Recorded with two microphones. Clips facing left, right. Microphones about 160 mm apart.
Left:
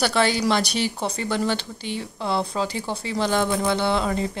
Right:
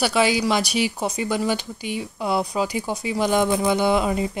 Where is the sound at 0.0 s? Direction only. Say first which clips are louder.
Right 1 dB; 10° right (ahead or behind).